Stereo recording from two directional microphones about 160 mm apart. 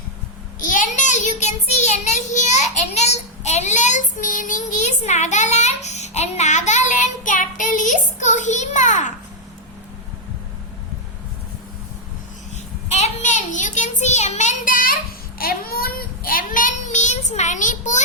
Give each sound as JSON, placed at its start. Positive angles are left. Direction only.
{"t": 0.6, "sound": "child singing", "side_deg": 55}
{"t": 12.9, "sound": "child singing", "side_deg": 45}
{"t": 15.4, "sound": "a child's voice", "side_deg": 70}